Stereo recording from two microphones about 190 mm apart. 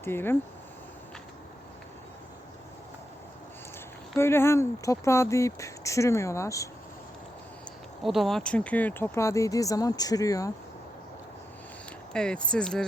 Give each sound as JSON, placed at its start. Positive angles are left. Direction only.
{"t": 0.0, "sound": "speech", "side_deg": 10}
{"t": 4.2, "sound": "speech", "side_deg": 15}
{"t": 8.0, "sound": "speech", "side_deg": 0}
{"t": 12.1, "sound": "speech", "side_deg": 5}